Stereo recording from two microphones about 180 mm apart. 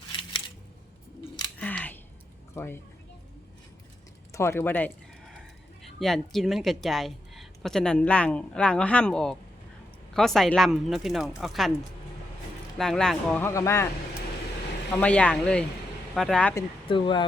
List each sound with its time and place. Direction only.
0.1 s scissors: 25° left (ahead or behind)
1.5 s scissors: 10° left (ahead or behind)
2.6 s speech: 15° left (ahead or behind)
4.3 s speech: 15° left (ahead or behind)
6.0 s a woman's voice: centre (ahead or behind)
12.7 s speech: centre (ahead or behind)
15.0 s a woman's voice: 5° left (ahead or behind)
16.6 s speech: 25° left (ahead or behind)